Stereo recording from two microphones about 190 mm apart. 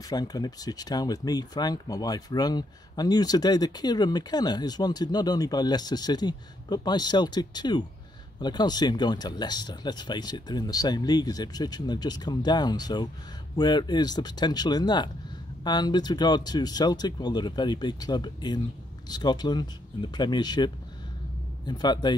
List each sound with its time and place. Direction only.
0.1 s speech: 20° left (ahead or behind)